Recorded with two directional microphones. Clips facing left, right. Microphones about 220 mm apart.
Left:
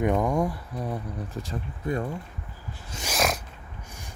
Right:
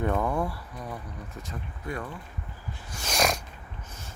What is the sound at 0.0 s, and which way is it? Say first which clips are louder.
Speech: left 3 dB; 15° left (ahead or behind).